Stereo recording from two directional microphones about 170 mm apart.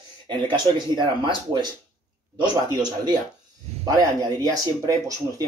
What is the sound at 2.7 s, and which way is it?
Speech, 20° right (ahead or behind).